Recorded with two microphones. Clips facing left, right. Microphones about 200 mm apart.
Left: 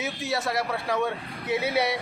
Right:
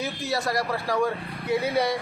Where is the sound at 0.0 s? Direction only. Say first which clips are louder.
Right 1 dB; centre (ahead or behind).